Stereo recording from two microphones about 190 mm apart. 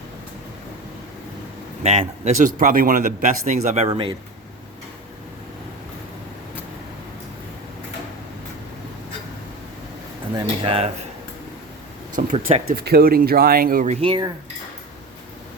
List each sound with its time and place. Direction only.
1.8 s a man's voice: 35° right (ahead or behind)
2.6 s speech: 45° right (ahead or behind)
3.8 s speech: 25° right (ahead or behind)
10.3 s speech: 25° right (ahead or behind)
12.1 s speech: 40° right (ahead or behind)
12.7 s speech: 55° right (ahead or behind); by 14.3 s 30° right (ahead or behind)